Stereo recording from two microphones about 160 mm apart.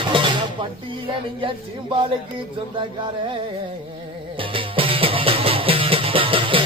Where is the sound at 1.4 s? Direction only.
35° right (ahead or behind).